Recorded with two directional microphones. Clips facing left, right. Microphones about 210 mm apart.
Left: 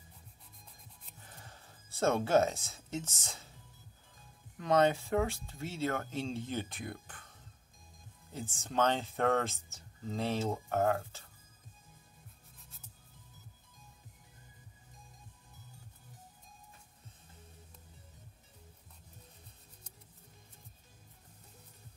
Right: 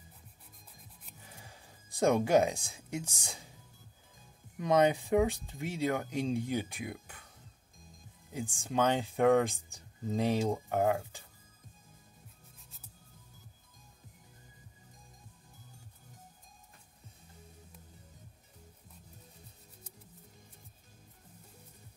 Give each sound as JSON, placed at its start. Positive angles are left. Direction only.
{"t": 1.2, "sound": "music", "side_deg": -10}
{"t": 4.6, "sound": "speech", "side_deg": -15}